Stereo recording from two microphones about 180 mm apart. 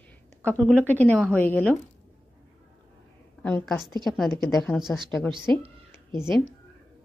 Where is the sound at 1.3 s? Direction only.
10° left (ahead or behind).